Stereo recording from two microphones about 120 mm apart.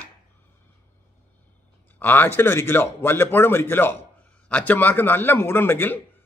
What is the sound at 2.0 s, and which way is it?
Speech, 15° left (ahead or behind).